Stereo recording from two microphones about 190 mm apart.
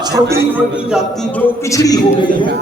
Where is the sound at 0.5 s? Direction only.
5° right (ahead or behind).